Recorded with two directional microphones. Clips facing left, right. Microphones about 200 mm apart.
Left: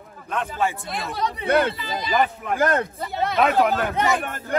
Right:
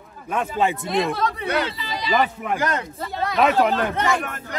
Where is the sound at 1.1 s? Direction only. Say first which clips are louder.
Right 2 dB; 20° left (ahead or behind).